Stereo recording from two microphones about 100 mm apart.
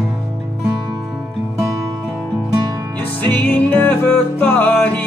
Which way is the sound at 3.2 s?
15° left (ahead or behind).